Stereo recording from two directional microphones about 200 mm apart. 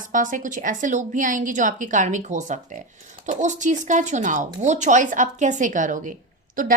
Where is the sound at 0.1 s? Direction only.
40° right (ahead or behind).